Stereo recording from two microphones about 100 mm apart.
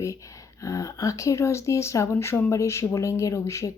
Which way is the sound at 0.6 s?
35° left (ahead or behind).